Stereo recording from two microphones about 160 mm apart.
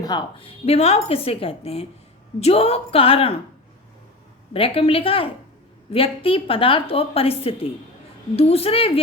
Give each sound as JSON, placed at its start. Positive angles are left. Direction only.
{"t": 0.0, "sound": "a woman's voice", "side_deg": 25}
{"t": 4.5, "sound": "a woman's voice", "side_deg": 35}